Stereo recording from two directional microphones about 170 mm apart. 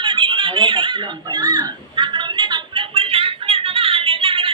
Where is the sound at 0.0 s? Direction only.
30° right (ahead or behind).